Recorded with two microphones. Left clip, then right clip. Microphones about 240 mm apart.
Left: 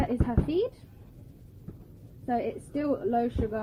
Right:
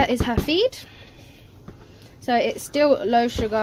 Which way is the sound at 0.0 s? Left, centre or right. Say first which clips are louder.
Right 9 dB; right.